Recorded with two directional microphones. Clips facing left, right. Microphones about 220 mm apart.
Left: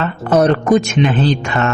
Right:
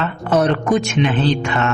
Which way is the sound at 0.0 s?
40° left (ahead or behind).